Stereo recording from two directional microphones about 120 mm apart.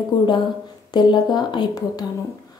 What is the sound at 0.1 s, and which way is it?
Speech, 40° left (ahead or behind).